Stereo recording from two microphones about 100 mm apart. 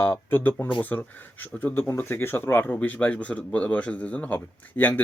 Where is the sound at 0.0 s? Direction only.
25° left (ahead or behind).